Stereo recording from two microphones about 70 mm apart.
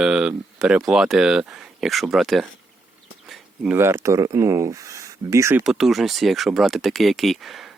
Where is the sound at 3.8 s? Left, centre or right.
Right.